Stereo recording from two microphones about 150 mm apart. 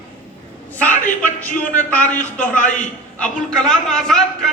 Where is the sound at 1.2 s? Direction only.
10° left (ahead or behind).